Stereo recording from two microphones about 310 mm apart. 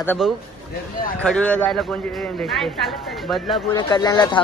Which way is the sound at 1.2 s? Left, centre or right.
Centre.